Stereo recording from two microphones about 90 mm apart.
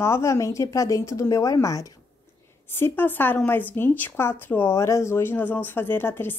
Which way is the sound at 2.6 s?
25° left (ahead or behind).